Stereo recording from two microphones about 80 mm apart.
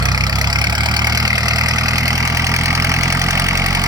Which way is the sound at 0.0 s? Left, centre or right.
Right.